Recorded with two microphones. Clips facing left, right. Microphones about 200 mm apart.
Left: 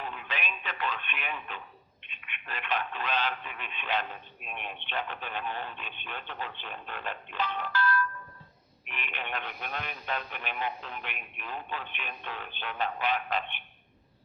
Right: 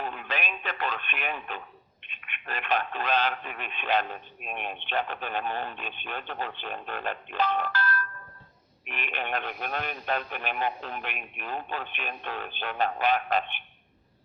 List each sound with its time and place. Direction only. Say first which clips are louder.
0.0 s radio: right 4 dB; 50° right (ahead or behind)
2.0 s speech: right 4 dB; 50° right (ahead or behind)